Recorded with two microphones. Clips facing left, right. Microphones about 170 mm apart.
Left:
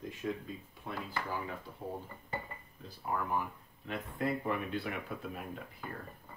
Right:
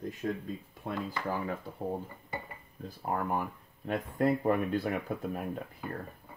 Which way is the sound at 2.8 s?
45° right (ahead or behind).